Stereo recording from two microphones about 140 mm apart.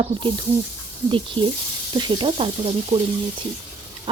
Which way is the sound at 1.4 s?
40° right (ahead or behind).